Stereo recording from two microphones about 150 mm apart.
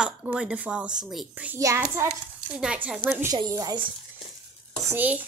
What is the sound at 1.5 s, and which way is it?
Speech, 20° right (ahead or behind).